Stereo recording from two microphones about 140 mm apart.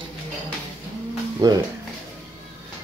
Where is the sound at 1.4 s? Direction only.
25° right (ahead or behind).